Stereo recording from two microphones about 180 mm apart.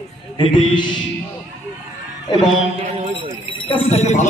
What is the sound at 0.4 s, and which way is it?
Speech, 25° left (ahead or behind).